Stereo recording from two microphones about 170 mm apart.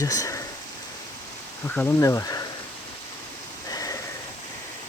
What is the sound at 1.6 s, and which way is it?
Speech, 10° left (ahead or behind).